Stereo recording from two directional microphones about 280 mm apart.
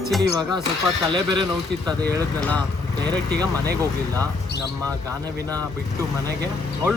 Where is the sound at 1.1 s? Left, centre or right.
Centre.